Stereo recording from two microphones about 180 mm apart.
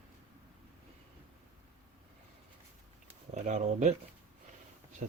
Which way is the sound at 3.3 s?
40° right (ahead or behind).